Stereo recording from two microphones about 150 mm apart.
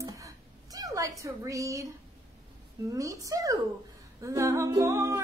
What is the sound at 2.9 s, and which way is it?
Music, 20° right (ahead or behind).